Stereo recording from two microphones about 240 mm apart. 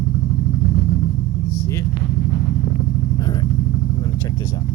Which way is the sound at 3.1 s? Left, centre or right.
Centre.